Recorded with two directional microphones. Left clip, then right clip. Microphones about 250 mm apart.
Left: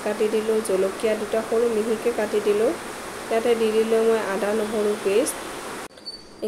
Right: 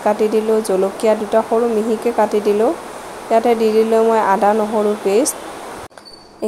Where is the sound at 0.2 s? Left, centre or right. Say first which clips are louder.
Right 6 dB; right.